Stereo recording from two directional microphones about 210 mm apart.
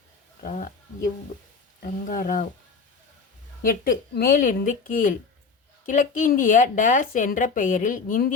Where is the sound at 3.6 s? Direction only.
40° left (ahead or behind).